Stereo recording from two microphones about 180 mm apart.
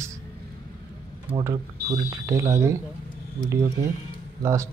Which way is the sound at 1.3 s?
15° right (ahead or behind).